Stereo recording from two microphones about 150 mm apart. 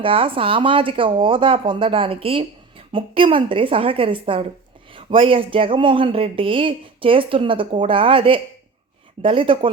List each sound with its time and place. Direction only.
0.0 s speech: 35° right (ahead or behind)